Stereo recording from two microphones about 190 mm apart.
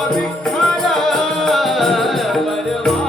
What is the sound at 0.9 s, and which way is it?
Music, centre (ahead or behind).